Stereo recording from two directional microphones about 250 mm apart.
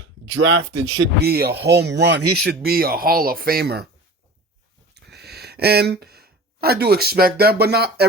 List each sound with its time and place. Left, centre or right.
0.0 s speech: right
1.2 s speech: right
4.9 s speech: right